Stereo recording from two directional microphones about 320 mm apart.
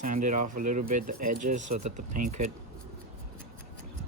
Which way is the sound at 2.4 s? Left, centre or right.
Right.